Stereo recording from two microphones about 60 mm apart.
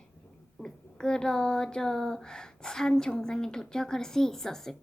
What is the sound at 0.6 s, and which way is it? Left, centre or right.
A woman's voice, centre.